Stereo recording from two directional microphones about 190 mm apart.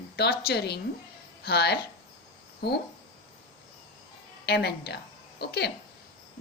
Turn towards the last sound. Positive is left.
turn(degrees=60)  # may be behind; listen again after turning